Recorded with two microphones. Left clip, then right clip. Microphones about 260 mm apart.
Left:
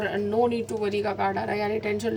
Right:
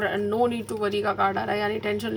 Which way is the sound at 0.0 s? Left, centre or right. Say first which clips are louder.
Right 1 dB; right.